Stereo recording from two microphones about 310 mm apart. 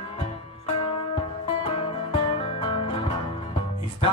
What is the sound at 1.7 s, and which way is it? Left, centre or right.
Music, centre.